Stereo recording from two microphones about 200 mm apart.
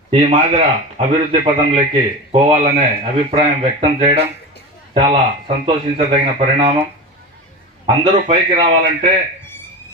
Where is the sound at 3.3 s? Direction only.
30° right (ahead or behind).